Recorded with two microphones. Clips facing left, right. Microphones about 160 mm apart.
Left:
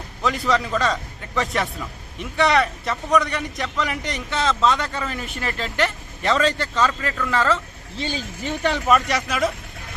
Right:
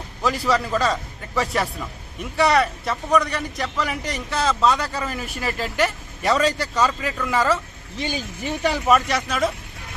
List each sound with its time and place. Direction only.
0.2 s a man's voice: 5° right (ahead or behind)